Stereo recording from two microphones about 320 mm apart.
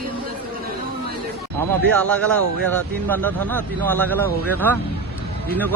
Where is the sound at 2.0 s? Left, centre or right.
Centre.